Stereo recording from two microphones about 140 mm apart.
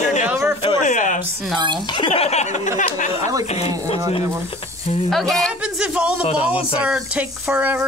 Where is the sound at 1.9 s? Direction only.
35° left (ahead or behind).